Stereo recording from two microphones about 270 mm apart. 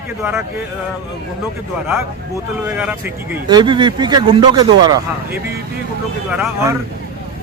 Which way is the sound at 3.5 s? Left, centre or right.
Centre.